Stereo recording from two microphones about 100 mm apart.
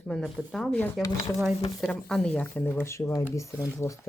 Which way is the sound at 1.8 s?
5° left (ahead or behind).